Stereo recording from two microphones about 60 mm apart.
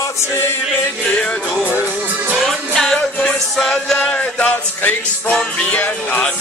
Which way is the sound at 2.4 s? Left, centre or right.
Centre.